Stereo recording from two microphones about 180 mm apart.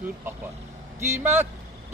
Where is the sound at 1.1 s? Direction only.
15° right (ahead or behind).